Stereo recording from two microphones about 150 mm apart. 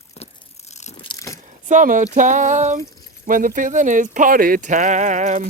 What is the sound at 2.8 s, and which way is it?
Speech, 65° right (ahead or behind).